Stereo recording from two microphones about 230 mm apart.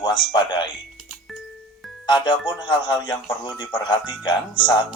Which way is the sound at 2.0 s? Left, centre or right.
Centre.